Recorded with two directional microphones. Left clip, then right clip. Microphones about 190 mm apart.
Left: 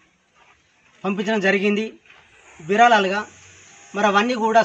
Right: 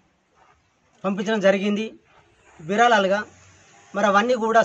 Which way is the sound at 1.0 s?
30° right (ahead or behind).